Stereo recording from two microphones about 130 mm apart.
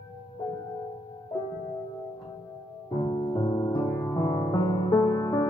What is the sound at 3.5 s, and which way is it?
Music, 35° left (ahead or behind).